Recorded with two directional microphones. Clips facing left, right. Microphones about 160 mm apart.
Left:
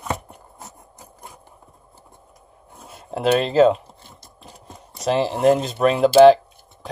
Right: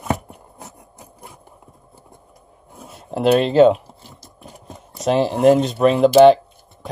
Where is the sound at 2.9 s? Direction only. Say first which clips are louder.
Right 3 dB; centre (ahead or behind).